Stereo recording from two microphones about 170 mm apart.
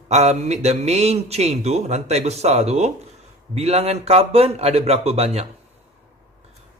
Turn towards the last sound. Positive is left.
turn(degrees=-40)  # may be behind; listen again after turning